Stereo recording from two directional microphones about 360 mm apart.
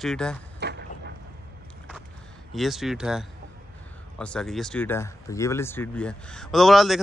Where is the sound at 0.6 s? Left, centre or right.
Right.